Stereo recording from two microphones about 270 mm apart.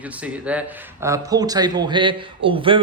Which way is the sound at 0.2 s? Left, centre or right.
Centre.